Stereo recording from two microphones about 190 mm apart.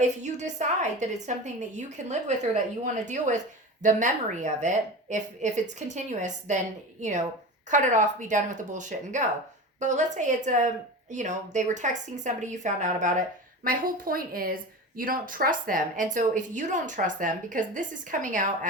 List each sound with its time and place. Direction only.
0.0 s a woman's voice: 40° right (ahead or behind)